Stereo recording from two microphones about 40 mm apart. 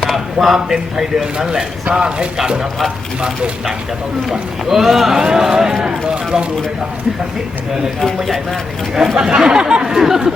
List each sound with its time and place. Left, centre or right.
0.0 s speech: centre
1.4 s a man's voice: centre
4.3 s speech: centre
9.1 s a man's voice: right
9.8 s speech: centre